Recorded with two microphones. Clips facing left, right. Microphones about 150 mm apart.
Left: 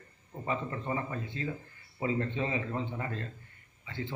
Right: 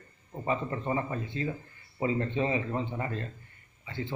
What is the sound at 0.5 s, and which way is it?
Speech, 20° right (ahead or behind).